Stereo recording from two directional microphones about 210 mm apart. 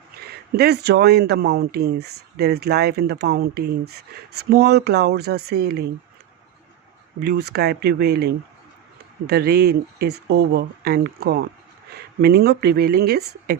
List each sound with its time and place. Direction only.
0.5 s speech: 50° right (ahead or behind)
7.2 s speech: 50° right (ahead or behind)